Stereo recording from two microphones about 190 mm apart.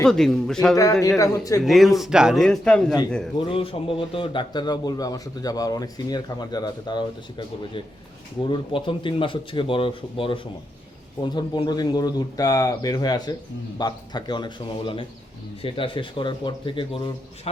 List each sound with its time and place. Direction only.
0.0 s a man's voice: centre (ahead or behind)
1.2 s speech: 15° left (ahead or behind)
1.6 s a man's voice: centre (ahead or behind)
3.3 s a man's voice: 30° left (ahead or behind)